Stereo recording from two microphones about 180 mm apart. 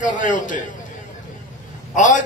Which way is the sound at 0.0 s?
45° left (ahead or behind).